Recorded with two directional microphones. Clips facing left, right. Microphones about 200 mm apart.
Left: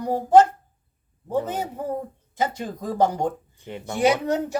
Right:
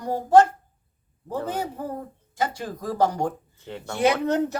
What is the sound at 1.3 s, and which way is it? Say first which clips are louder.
Speech: left 3 dB; 20° left (ahead or behind).